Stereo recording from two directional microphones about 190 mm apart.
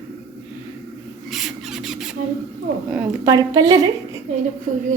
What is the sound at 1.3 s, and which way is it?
Squawk, centre (ahead or behind).